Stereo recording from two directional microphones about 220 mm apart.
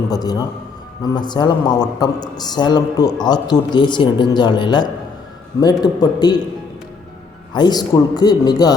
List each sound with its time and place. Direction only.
0.1 s a man's voice: 15° left (ahead or behind)
7.5 s a man's voice: 20° left (ahead or behind)